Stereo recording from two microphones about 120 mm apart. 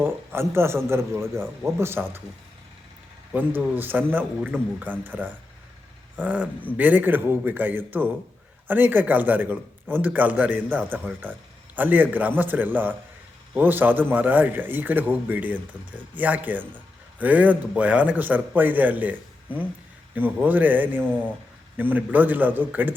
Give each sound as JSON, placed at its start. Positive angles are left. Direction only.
{"t": 0.0, "sound": "speech", "side_deg": -20}
{"t": 3.3, "sound": "a man's voice", "side_deg": -15}
{"t": 20.1, "sound": "a man's voice", "side_deg": -15}